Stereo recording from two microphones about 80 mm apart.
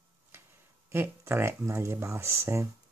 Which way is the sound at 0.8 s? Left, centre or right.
Right.